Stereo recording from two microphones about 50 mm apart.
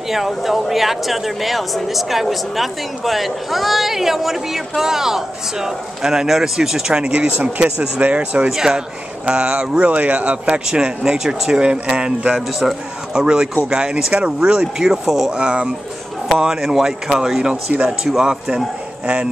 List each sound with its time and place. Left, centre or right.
0.1 s speech: centre
7.2 s speech: right
8.5 s speech: centre
10.7 s speech: centre
12.4 s speech: centre
13.1 s speech: centre
18.0 s speech: centre